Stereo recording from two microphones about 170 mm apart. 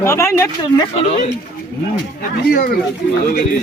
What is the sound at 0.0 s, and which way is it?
Speech, 15° left (ahead or behind).